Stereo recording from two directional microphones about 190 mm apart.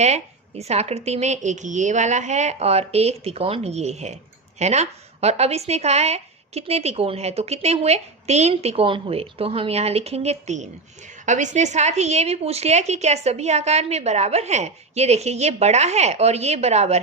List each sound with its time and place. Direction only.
0.0 s speech: 35° right (ahead or behind)